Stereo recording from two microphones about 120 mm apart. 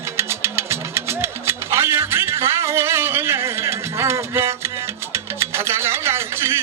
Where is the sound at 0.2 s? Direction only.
20° right (ahead or behind).